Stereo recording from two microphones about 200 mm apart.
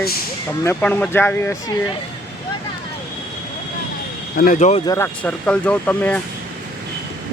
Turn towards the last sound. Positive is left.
turn(degrees=5)  # may be behind; listen again after turning